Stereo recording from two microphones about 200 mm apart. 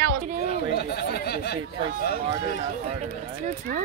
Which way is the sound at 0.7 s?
55° left (ahead or behind).